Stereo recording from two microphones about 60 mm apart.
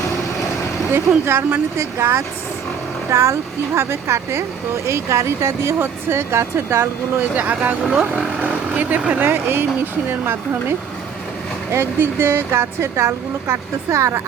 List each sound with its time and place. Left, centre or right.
0.9 s speech: right
1.8 s speech: right
3.8 s speech: right
7.2 s speech: right
7.9 s speech: centre
8.4 s speech: right
9.3 s speech: right
11.9 s speech: right